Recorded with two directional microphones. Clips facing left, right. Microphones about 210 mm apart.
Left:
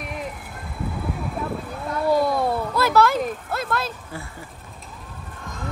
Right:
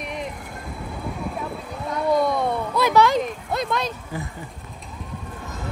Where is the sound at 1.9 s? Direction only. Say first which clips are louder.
Even; 5° left (ahead or behind).